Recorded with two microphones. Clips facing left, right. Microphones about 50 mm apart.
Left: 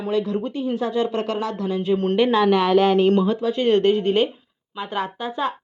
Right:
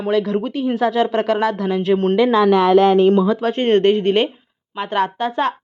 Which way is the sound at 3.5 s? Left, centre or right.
Right.